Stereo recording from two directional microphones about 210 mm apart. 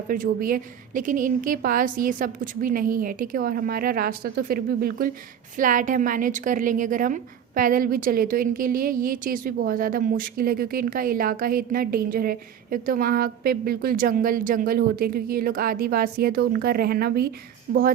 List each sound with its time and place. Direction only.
0.1 s a woman's voice: 40° right (ahead or behind)